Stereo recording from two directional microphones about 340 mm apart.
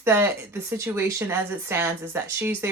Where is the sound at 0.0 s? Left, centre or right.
Centre.